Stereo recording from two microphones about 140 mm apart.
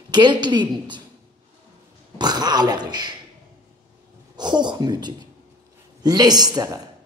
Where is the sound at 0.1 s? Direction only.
30° right (ahead or behind).